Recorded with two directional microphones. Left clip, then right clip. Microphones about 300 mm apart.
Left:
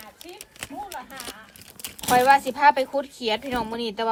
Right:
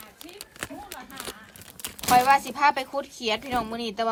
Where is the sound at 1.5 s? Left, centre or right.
Right.